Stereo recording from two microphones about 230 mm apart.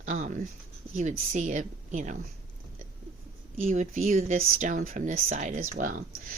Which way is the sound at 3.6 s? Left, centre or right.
Right.